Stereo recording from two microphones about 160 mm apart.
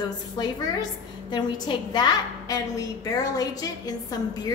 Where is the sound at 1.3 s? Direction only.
30° left (ahead or behind).